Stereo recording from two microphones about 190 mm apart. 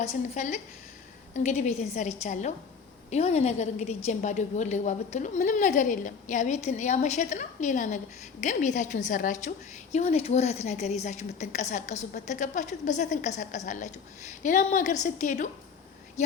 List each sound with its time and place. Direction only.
0.0 s a woman's voice: 35° left (ahead or behind)